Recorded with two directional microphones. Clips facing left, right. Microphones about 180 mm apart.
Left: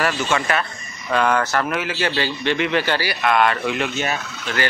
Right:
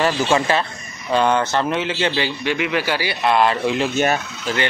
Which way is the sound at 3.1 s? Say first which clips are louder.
Right 3 dB; 30° right (ahead or behind).